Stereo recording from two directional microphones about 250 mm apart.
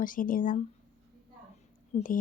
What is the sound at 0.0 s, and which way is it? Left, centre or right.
Speech, left.